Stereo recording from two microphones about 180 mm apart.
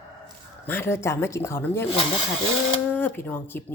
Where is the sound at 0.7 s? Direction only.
15° left (ahead or behind).